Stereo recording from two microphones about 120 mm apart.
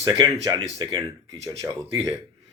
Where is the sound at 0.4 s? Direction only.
35° right (ahead or behind).